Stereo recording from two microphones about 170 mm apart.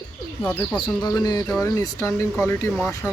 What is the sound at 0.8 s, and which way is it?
Speech, 20° left (ahead or behind).